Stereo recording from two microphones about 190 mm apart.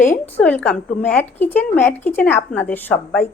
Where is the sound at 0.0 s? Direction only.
10° left (ahead or behind).